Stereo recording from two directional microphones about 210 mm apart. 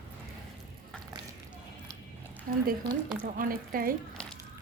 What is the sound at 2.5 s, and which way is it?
A woman's voice, 45° right (ahead or behind).